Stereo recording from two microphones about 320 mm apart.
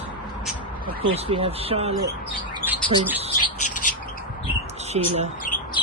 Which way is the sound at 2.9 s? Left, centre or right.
Centre.